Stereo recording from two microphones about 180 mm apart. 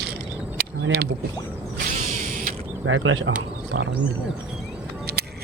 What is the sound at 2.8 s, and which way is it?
Speech, 90° right.